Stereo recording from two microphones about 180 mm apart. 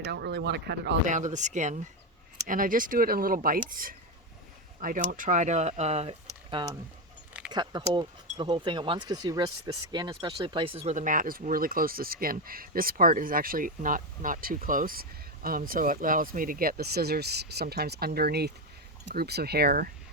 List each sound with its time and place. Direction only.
0.0 s speech: 70° right (ahead or behind)
1.0 s speech: 45° right (ahead or behind)